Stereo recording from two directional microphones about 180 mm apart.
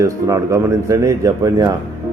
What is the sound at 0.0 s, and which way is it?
A man's voice, 20° right (ahead or behind).